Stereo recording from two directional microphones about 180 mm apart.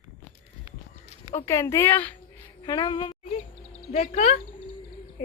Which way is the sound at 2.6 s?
20° left (ahead or behind).